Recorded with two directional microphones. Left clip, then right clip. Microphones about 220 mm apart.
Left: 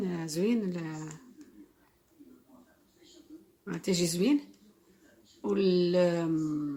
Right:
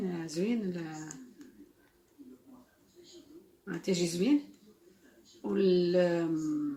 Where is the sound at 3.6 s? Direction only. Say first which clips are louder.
Left 1 dB; 40° left (ahead or behind).